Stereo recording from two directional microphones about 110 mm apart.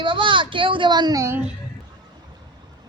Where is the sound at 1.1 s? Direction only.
25° right (ahead or behind).